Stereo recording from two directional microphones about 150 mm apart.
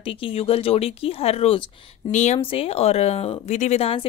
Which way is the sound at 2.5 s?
40° left (ahead or behind).